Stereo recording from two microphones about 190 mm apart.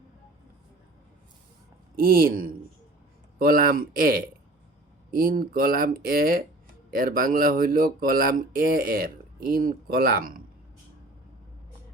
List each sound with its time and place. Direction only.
2.0 s speech: 50° right (ahead or behind)